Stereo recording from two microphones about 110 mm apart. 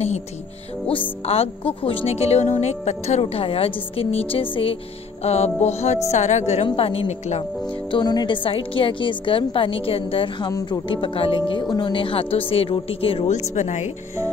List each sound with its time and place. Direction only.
1.2 s a woman's voice: 65° left (ahead or behind)
2.1 s a woman's voice: 70° left (ahead or behind); by 4.7 s 55° left (ahead or behind)
5.2 s music: 75° left (ahead or behind)
6.6 s a woman's voice: 55° left (ahead or behind); by 7.4 s 80° left
7.9 s a woman's voice: 40° left (ahead or behind)
10.5 s a woman's voice: 40° left (ahead or behind)
11.6 s a woman's voice: 40° left (ahead or behind); by 13.9 s 90° left